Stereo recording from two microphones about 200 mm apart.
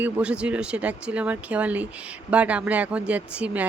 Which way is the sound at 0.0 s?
5° right (ahead or behind).